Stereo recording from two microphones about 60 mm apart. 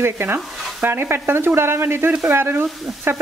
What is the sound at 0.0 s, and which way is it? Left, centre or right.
Speech, right.